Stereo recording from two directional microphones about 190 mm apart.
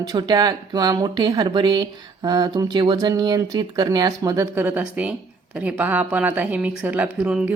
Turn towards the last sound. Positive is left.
turn(degrees=-5)  # may be behind; listen again after turning